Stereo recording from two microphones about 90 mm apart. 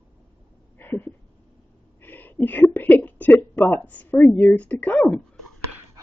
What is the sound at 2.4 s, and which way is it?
A woman's voice, 25° left (ahead or behind).